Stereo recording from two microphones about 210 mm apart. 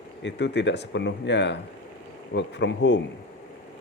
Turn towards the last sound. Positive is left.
turn(degrees=55)  # may be behind; listen again after turning